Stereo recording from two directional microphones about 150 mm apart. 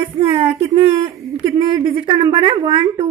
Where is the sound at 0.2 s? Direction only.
40° right (ahead or behind).